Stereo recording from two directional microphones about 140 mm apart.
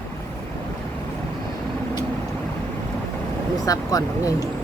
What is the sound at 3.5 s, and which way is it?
Speech, 25° left (ahead or behind).